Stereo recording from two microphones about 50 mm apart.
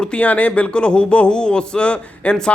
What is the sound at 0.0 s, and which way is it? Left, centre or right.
Speech, left.